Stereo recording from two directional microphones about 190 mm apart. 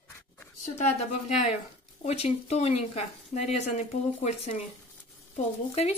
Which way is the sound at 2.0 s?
35° left (ahead or behind).